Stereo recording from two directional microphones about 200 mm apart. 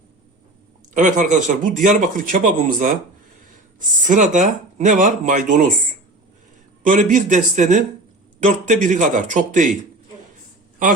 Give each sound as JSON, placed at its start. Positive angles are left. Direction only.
{"t": 0.9, "sound": "a man's voice", "side_deg": -40}
{"t": 6.8, "sound": "a man's voice", "side_deg": -40}